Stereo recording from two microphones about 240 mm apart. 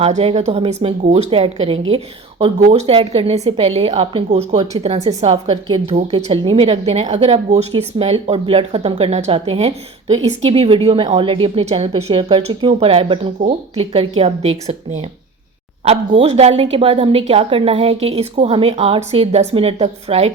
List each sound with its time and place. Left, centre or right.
0.0 s a woman's voice: right
15.8 s a woman's voice: right